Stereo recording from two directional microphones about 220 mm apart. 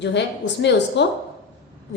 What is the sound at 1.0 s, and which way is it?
Speech, 50° left (ahead or behind).